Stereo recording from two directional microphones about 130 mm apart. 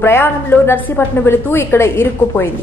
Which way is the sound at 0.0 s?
20° left (ahead or behind).